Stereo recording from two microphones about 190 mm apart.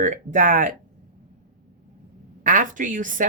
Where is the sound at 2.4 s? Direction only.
45° right (ahead or behind).